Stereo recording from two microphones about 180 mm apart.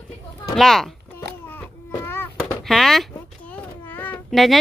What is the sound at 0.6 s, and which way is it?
Speech, centre (ahead or behind).